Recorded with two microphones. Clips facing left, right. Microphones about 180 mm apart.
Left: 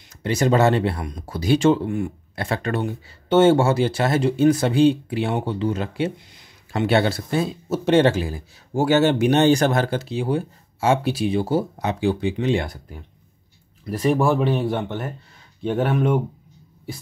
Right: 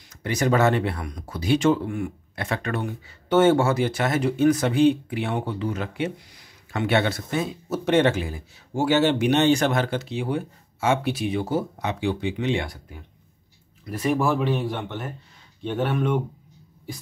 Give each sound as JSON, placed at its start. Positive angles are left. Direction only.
{"t": 0.2, "sound": "speech", "side_deg": 30}
{"t": 13.8, "sound": "speech", "side_deg": 35}